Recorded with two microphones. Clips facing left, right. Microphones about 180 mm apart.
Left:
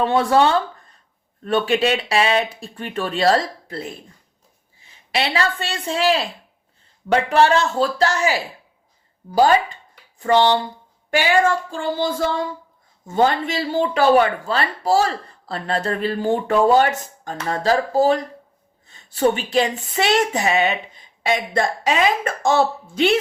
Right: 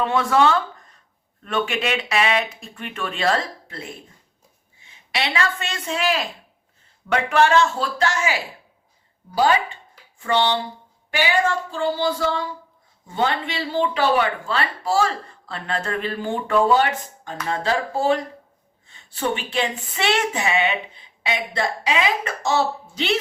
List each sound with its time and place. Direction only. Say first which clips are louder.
0.0 s a woman's voice: left 2 dB; 35° left (ahead or behind)
11.7 s speech: even; 50° left (ahead or behind)